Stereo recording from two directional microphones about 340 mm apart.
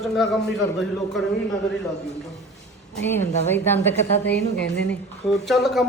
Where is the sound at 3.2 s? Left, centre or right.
Centre.